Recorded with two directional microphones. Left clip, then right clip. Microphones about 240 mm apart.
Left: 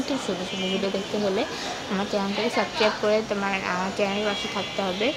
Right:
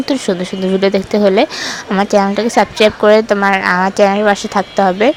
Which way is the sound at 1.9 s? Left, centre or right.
Right.